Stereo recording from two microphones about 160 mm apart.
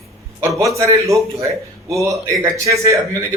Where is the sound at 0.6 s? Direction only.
20° right (ahead or behind).